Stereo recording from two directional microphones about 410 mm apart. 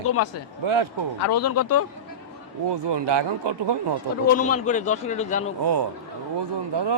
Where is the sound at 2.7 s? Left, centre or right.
Right.